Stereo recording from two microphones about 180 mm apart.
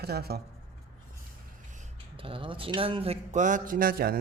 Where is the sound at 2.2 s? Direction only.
30° right (ahead or behind); by 4.1 s 55° right (ahead or behind).